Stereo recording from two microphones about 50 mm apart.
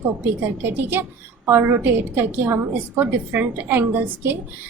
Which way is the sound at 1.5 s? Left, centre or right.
Right.